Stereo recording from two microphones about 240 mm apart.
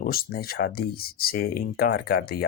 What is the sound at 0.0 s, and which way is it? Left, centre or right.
Speech, left.